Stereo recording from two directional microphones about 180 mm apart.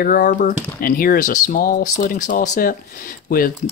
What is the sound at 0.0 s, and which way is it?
Speech, 50° left (ahead or behind).